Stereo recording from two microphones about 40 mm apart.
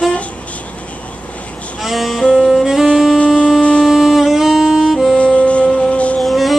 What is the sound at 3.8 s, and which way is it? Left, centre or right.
Music, centre.